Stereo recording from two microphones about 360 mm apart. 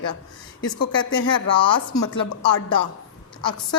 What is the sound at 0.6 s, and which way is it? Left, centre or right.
Speech, left.